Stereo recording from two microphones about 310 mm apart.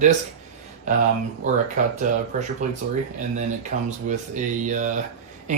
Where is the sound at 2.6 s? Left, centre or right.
Right.